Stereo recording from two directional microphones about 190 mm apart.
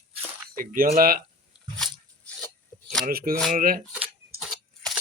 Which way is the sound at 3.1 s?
50° right (ahead or behind).